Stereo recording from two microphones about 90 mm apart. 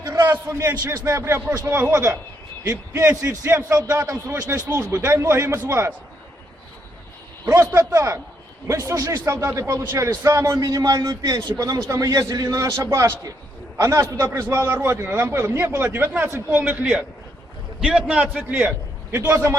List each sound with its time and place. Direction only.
0.0 s a man's voice: 30° right (ahead or behind)
1.9 s a man's voice: 35° right (ahead or behind)
3.4 s a man's voice: 25° right (ahead or behind)
7.5 s a man's voice: 35° right (ahead or behind)
14.3 s a man's voice: 25° right (ahead or behind)
17.7 s a man's voice: 10° right (ahead or behind)
19.1 s a man's voice: 25° right (ahead or behind)